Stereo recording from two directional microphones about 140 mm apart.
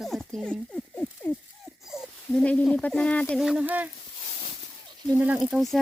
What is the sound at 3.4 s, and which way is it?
Speech, 5° right (ahead or behind).